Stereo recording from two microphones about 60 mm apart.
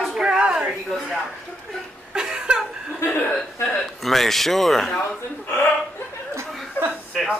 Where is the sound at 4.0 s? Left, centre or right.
Centre.